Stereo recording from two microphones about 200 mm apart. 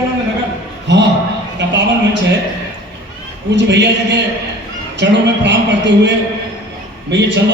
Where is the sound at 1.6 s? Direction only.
65° right (ahead or behind).